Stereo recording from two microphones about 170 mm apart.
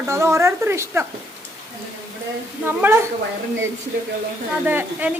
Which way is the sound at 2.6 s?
15° right (ahead or behind).